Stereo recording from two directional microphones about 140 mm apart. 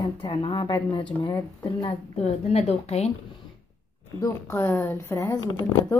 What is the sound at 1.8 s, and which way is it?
A woman's voice, 40° left (ahead or behind).